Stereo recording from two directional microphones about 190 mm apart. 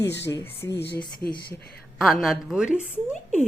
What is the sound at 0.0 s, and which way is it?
Speech, 65° left (ahead or behind).